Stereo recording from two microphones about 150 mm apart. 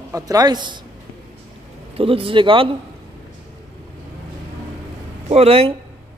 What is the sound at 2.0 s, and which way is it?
Speech, 40° right (ahead or behind).